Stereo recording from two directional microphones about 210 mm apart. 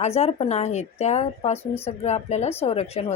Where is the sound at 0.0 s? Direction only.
30° left (ahead or behind).